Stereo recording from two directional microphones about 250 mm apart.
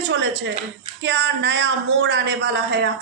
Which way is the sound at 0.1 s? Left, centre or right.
Right.